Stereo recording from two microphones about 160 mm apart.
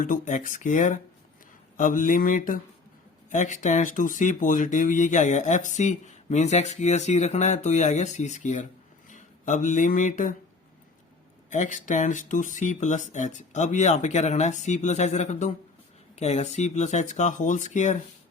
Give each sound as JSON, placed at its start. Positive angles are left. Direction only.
{"t": 0.0, "sound": "speech", "side_deg": 55}
{"t": 1.7, "sound": "a sound", "side_deg": 55}
{"t": 3.2, "sound": "speech", "side_deg": 50}
{"t": 11.5, "sound": "speech", "side_deg": 50}